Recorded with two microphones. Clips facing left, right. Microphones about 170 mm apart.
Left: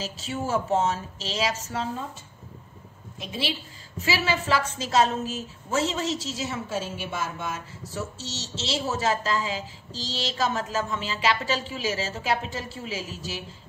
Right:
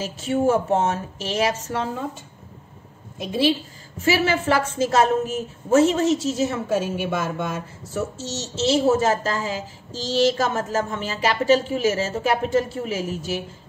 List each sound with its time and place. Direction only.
0.0 s a woman's voice: 55° right (ahead or behind)
4.0 s a woman's voice: 50° right (ahead or behind)